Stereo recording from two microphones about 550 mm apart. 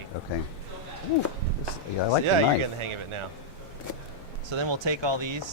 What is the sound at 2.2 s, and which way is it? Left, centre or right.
A man's voice, right.